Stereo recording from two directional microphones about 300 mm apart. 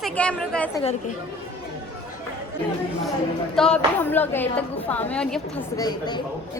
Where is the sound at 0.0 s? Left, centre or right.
Centre.